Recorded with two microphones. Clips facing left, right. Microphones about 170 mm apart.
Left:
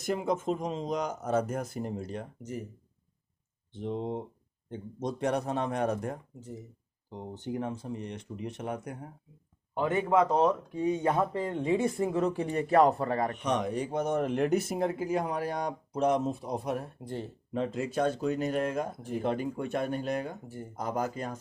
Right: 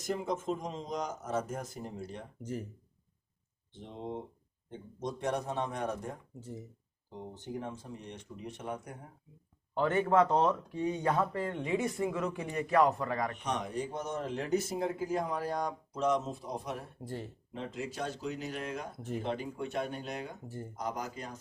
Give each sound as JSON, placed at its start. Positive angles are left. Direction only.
{"t": 0.0, "sound": "speech", "side_deg": 70}
{"t": 5.2, "sound": "speech", "side_deg": 70}
{"t": 7.4, "sound": "speech", "side_deg": 80}
{"t": 9.7, "sound": "speech", "side_deg": 15}
{"t": 10.8, "sound": "speech", "side_deg": 20}
{"t": 11.5, "sound": "speech", "side_deg": 30}
{"t": 13.4, "sound": "speech", "side_deg": 70}
{"t": 17.0, "sound": "speech", "side_deg": 20}
{"t": 17.6, "sound": "speech", "side_deg": 55}